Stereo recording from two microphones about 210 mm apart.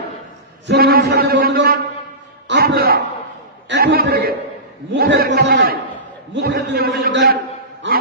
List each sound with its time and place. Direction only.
0.7 s a man's voice: 45° right (ahead or behind)
2.4 s a sound: 50° right (ahead or behind)
4.9 s a man's voice: 50° right (ahead or behind)
7.8 s dog: 55° right (ahead or behind)